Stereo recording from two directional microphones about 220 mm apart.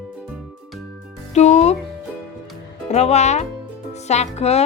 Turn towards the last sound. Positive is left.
turn(degrees=30)  # may be behind; listen again after turning